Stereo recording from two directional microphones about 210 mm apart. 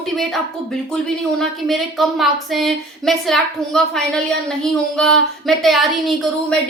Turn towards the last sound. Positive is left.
turn(degrees=0)  # may be behind; listen again after turning